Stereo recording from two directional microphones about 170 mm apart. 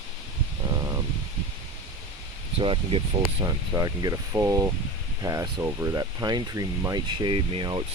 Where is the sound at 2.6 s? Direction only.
30° right (ahead or behind).